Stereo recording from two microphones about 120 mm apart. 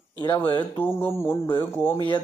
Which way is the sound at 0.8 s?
20° left (ahead or behind).